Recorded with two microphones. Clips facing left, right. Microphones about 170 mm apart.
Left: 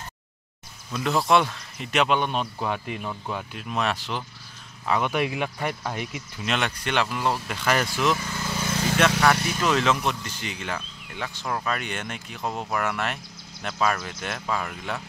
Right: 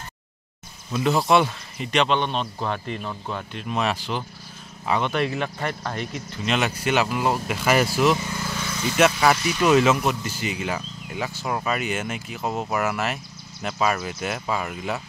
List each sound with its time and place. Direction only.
0.9 s speech: centre (ahead or behind)
5.0 s speech: 10° left (ahead or behind)
6.5 s speech: 5° right (ahead or behind)
8.1 s speech: 20° right (ahead or behind)
9.0 s speech: 5° right (ahead or behind)